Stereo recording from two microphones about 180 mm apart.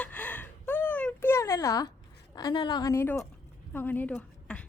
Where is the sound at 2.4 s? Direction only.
20° left (ahead or behind); by 4.6 s 5° left (ahead or behind).